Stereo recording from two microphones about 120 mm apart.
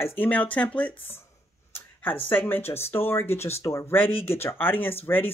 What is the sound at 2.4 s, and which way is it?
Speech, 15° left (ahead or behind).